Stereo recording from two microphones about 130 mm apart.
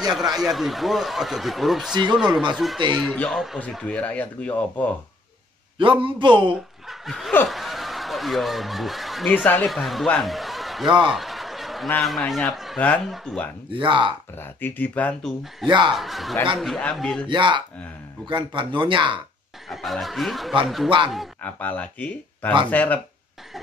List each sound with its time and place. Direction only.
0.1 s speech: 5° right (ahead or behind)
5.8 s speech: 40° right (ahead or behind)
6.5 s speech: centre (ahead or behind)
7.4 s honk: centre (ahead or behind)
9.3 s speech: 15° left (ahead or behind)
9.7 s speech: centre (ahead or behind)
13.7 s speech: 40° right (ahead or behind)
14.3 s speech: 15° left (ahead or behind)
15.6 s speech: 35° right (ahead or behind)
15.9 s speech: centre (ahead or behind)
17.3 s speech: 35° right (ahead or behind)
19.7 s speech: centre (ahead or behind)
21.4 s speech: 15° left (ahead or behind)